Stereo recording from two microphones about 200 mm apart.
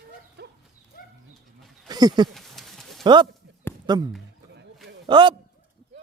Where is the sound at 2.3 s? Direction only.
Centre (ahead or behind).